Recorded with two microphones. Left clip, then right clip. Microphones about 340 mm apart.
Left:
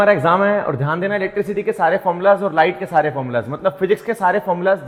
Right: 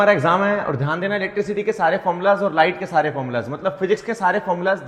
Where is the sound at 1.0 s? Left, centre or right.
Left.